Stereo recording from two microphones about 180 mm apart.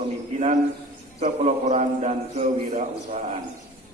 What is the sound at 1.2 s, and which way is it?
A man's voice, 40° right (ahead or behind).